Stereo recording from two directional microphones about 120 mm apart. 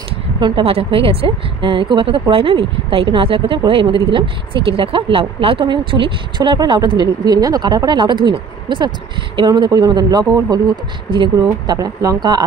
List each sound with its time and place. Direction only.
0.4 s a woman's voice: 50° right (ahead or behind); by 10.6 s 35° right (ahead or behind)
11.6 s speech: 35° right (ahead or behind)